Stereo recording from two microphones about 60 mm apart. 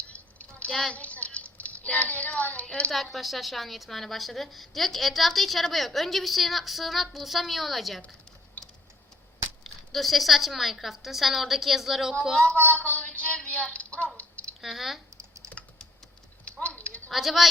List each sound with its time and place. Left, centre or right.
0.1 s a sound: left
0.7 s a woman's voice: centre
0.9 s a child's voice: left
2.9 s a woman's voice: centre
8.6 s tick-tock: left
9.6 s a woman's voice: centre
12.6 s a sound: left
14.6 s speech: centre
16.5 s a sound: left
17.1 s a woman's voice: centre